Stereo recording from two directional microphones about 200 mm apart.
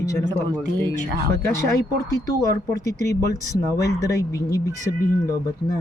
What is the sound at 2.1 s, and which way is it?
Speech, 15° left (ahead or behind).